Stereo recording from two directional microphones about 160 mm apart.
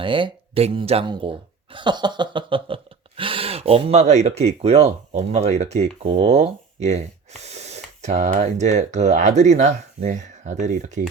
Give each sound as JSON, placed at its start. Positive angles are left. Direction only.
{"t": 0.0, "sound": "speech", "side_deg": -30}